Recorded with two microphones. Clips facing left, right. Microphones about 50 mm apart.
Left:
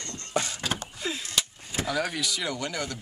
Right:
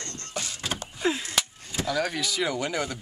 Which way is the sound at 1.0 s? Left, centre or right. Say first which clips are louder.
Right 5 dB; right.